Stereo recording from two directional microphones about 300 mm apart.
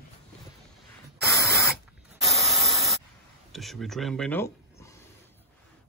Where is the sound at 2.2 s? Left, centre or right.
Centre.